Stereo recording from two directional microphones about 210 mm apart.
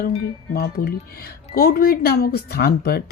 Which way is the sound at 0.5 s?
45° left (ahead or behind).